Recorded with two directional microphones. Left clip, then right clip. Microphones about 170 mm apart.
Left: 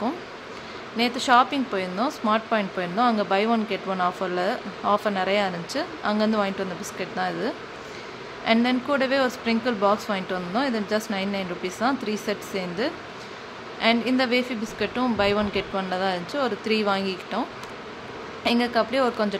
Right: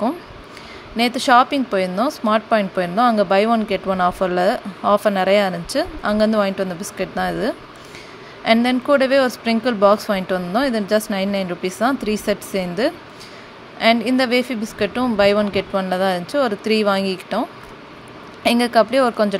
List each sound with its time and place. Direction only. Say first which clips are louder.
0.9 s speech: right 5 dB; 40° right (ahead or behind)